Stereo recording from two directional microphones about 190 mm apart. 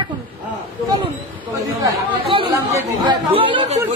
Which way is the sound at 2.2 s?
25° right (ahead or behind).